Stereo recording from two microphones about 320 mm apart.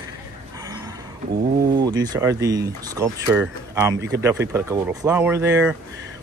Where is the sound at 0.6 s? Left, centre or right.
Centre.